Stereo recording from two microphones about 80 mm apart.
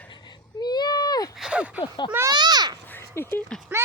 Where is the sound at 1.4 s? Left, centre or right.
Centre.